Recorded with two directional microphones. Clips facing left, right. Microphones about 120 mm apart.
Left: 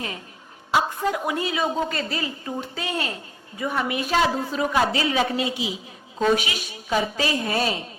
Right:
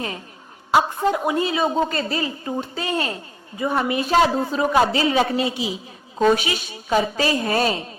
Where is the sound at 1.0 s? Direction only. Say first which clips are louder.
Right 4 dB; 30° right (ahead or behind).